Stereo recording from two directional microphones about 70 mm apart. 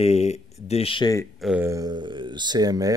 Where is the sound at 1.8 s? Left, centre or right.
Right.